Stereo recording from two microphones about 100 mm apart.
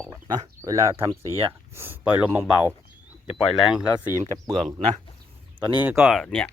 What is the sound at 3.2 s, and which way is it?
Speech, 5° right (ahead or behind).